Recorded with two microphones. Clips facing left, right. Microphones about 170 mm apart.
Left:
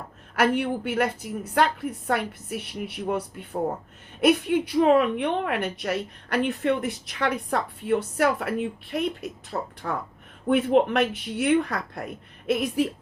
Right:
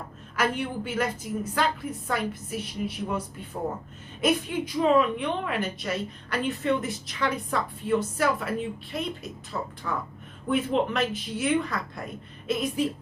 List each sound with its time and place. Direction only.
0.3 s a woman's voice: 60° left (ahead or behind)